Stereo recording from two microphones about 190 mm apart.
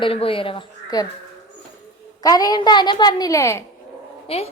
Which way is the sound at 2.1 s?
20° left (ahead or behind).